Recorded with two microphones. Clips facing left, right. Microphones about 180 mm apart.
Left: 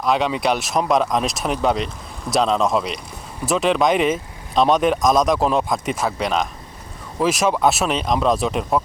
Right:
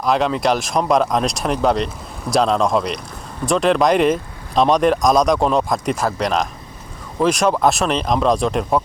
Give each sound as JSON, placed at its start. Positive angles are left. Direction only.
{"t": 0.0, "sound": "speech", "side_deg": 0}